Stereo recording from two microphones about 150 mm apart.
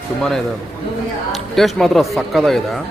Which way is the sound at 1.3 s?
Centre (ahead or behind).